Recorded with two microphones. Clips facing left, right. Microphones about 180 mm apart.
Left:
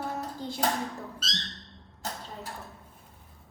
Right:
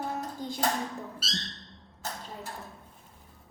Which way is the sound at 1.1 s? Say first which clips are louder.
Right 1 dB; 5° right (ahead or behind).